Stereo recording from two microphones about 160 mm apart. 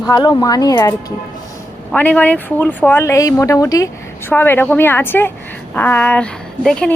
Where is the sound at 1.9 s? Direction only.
10° left (ahead or behind).